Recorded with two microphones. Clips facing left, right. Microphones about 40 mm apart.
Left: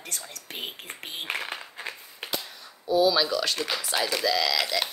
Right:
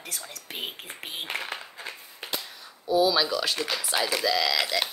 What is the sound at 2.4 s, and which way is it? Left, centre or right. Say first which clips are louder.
Speech: even; centre.